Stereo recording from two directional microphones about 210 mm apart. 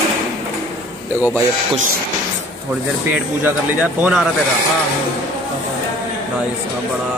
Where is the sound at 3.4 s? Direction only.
5° right (ahead or behind).